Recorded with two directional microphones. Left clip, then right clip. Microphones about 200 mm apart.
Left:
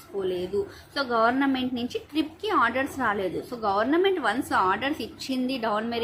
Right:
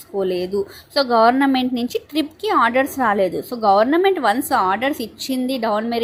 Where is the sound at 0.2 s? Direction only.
35° right (ahead or behind).